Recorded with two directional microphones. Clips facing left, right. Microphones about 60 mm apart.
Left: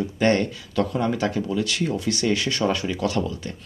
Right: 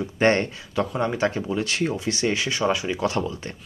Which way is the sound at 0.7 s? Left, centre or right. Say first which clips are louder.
Left 2 dB; centre.